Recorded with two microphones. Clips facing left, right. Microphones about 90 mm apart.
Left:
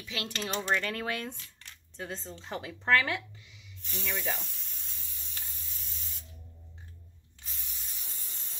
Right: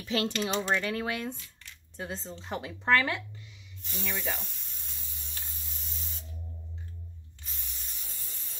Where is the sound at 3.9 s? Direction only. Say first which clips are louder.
Even; 10° right (ahead or behind).